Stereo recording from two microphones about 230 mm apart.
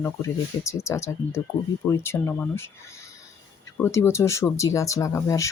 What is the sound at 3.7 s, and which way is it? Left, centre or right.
Speech, centre.